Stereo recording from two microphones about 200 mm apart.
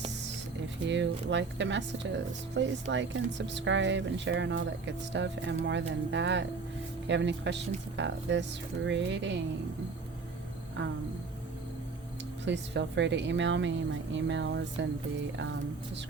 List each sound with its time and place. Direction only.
0.9 s speech: 65° right (ahead or behind)
12.5 s speech: 60° right (ahead or behind)